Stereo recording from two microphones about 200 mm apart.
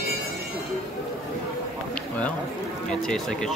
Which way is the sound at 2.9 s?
5° left (ahead or behind).